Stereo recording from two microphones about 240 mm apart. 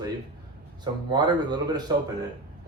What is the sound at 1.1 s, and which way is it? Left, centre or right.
Speech, centre.